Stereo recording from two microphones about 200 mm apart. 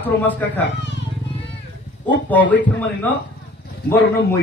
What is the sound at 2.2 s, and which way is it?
Speech, 10° left (ahead or behind).